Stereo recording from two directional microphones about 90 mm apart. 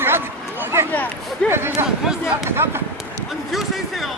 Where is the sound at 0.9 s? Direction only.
15° left (ahead or behind).